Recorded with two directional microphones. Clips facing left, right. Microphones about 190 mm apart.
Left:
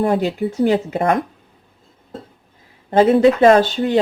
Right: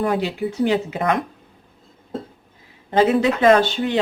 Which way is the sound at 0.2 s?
45° left (ahead or behind).